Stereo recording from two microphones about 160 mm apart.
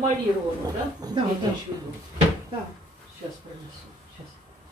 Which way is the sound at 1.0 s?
25° right (ahead or behind).